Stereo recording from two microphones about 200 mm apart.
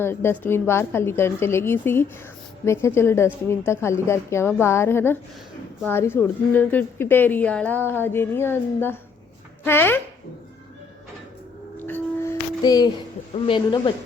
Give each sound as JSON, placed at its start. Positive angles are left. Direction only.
{"t": 0.0, "sound": "a woman's voice", "side_deg": 10}
{"t": 11.8, "sound": "music", "side_deg": 10}
{"t": 13.3, "sound": "a man's voice", "side_deg": 25}